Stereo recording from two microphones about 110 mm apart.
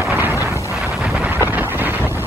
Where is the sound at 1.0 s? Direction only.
5° right (ahead or behind).